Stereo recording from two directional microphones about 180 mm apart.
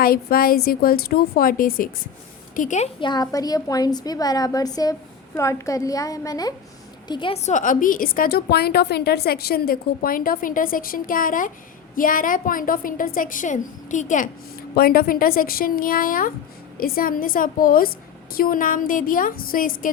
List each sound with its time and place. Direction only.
0.0 s a woman's voice: 55° left (ahead or behind)
2.6 s a woman's voice: 40° left (ahead or behind)
3.0 s a woman's voice: 25° left (ahead or behind); by 14.3 s 45° left (ahead or behind)
14.8 s a woman's voice: 55° left (ahead or behind)